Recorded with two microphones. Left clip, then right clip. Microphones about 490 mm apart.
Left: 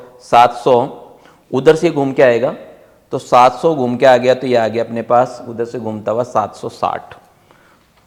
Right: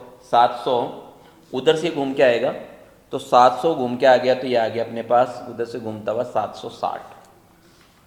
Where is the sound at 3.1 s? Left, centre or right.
Left.